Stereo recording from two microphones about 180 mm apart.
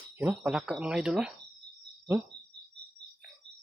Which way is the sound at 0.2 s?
5° right (ahead or behind).